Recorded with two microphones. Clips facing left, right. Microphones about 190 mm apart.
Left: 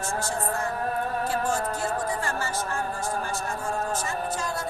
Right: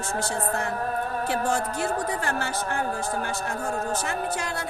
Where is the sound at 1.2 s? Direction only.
65° right (ahead or behind).